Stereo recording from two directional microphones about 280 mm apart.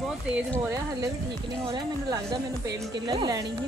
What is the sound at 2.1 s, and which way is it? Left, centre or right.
Speech, centre.